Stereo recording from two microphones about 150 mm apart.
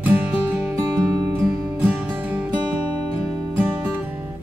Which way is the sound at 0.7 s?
25° right (ahead or behind).